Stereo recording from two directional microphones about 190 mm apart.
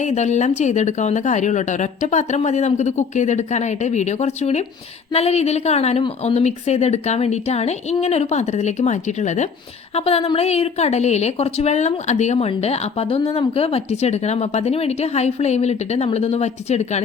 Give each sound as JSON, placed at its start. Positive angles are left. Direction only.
{"t": 0.0, "sound": "a woman's voice", "side_deg": 40}